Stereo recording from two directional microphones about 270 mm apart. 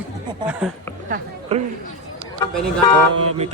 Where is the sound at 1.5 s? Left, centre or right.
Right.